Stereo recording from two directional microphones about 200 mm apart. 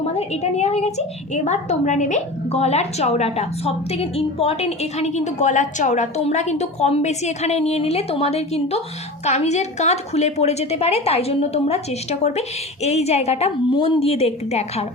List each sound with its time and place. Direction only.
0.0 s a woman's voice: 30° left (ahead or behind)